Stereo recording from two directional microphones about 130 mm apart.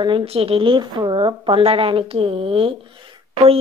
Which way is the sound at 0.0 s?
45° right (ahead or behind).